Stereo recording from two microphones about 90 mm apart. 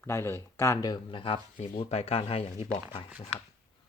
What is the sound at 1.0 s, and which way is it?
Speech, 80° left.